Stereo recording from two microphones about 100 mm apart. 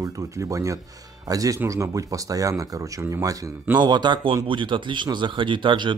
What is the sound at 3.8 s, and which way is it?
Speech, 45° right (ahead or behind).